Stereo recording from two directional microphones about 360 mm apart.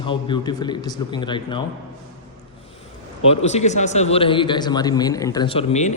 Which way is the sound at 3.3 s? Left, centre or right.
Centre.